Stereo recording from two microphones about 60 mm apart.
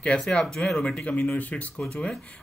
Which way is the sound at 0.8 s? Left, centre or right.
Left.